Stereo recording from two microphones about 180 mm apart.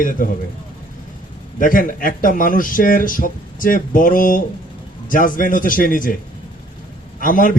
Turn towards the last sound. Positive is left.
turn(degrees=50)  # may be behind; listen again after turning